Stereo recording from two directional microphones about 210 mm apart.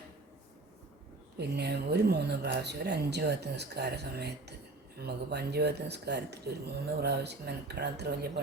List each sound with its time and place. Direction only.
1.4 s speech: 50° right (ahead or behind)